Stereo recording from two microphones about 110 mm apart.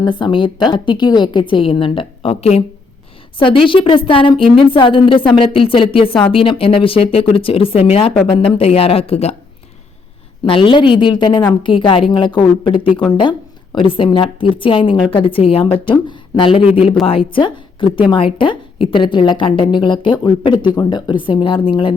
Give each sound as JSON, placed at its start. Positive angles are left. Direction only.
{"t": 0.0, "sound": "a woman's voice", "side_deg": 45}
{"t": 3.3, "sound": "a woman's voice", "side_deg": 50}
{"t": 10.4, "sound": "a woman's voice", "side_deg": 50}